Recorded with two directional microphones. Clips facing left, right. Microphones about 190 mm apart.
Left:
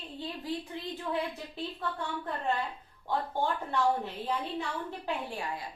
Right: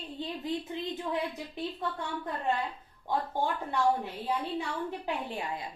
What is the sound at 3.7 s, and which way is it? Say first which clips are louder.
A woman's voice: right 1 dB; 15° right (ahead or behind).